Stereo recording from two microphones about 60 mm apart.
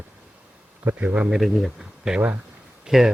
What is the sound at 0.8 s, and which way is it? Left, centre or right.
Speech, right.